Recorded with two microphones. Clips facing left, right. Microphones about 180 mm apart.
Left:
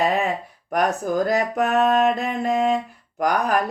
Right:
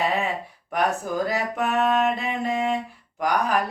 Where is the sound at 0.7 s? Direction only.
45° left (ahead or behind).